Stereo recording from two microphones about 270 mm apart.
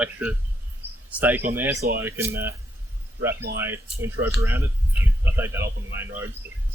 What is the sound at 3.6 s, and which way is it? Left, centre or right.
Speech, centre.